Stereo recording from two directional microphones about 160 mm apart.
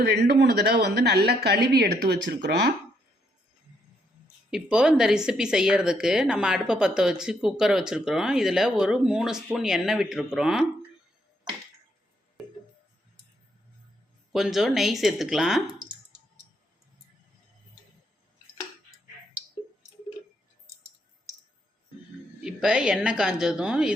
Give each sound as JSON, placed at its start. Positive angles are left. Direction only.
{"t": 0.0, "sound": "a woman's voice", "side_deg": -85}
{"t": 4.5, "sound": "a woman's voice", "side_deg": -5}
{"t": 14.3, "sound": "a woman's voice", "side_deg": 0}
{"t": 22.4, "sound": "a woman's voice", "side_deg": -5}